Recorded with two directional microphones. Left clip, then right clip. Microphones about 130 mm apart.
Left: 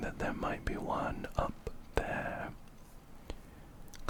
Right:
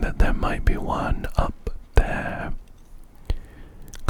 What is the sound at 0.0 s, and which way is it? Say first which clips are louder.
Whispering: right 10 dB; 35° right (ahead or behind).